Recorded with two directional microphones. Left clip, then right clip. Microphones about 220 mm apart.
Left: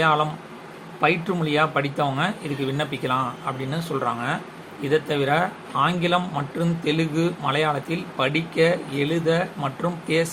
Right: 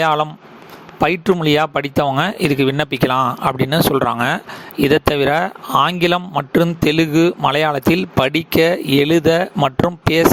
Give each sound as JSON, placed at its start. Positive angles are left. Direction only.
{"t": 0.0, "sound": "a man's voice", "side_deg": -50}